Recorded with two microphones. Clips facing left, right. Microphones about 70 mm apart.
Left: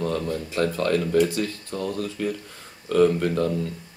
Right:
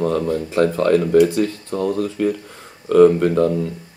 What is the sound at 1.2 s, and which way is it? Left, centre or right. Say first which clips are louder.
Speech: right 7 dB; centre.